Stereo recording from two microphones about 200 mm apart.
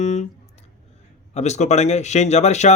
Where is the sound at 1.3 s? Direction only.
35° left (ahead or behind).